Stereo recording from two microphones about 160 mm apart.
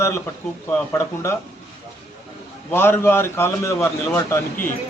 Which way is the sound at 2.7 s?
15° left (ahead or behind).